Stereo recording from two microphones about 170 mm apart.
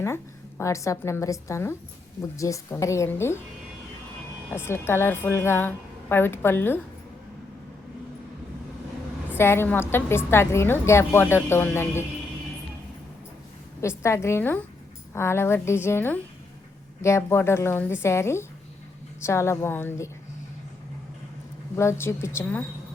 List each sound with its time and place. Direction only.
0.6 s a woman's voice: 15° left (ahead or behind)
4.6 s a woman's voice: 15° left (ahead or behind)
9.4 s a woman's voice: 15° left (ahead or behind)
13.8 s a woman's voice: 15° left (ahead or behind)
21.8 s a woman's voice: 15° left (ahead or behind)